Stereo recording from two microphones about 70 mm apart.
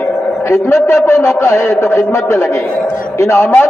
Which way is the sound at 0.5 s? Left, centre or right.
Left.